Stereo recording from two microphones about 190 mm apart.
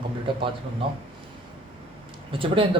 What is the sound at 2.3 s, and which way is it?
Speech, 30° right (ahead or behind).